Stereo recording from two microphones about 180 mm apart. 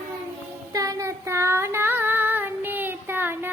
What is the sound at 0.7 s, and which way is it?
Female singing, 20° right (ahead or behind).